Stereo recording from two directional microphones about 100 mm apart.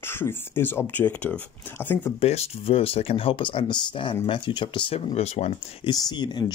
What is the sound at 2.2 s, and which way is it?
Speech, 85° left.